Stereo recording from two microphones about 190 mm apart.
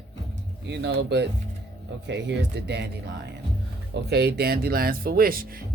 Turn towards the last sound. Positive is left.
turn(degrees=-50)  # may be behind; listen again after turning